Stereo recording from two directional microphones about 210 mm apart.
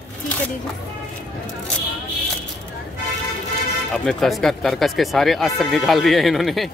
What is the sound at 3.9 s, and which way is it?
Speech, centre (ahead or behind).